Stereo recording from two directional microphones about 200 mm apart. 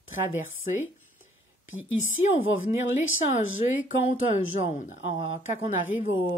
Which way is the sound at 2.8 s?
80° left.